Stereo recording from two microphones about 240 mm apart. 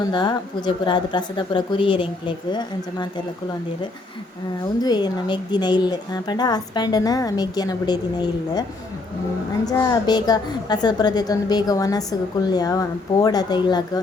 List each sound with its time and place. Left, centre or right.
0.1 s speech: centre
4.6 s a woman's voice: centre
9.6 s a woman's voice: centre